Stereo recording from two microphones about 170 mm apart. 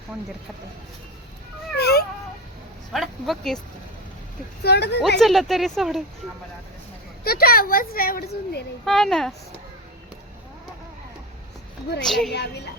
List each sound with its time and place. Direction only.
1.7 s cat: 70° left (ahead or behind)
2.9 s speech: centre (ahead or behind)
4.6 s a woman's voice: 80° left
5.2 s speech: centre (ahead or behind)
7.3 s a woman's voice: 60° left (ahead or behind)
8.8 s speech: centre (ahead or behind)
11.9 s speech: centre (ahead or behind)
12.3 s a woman's voice: 80° left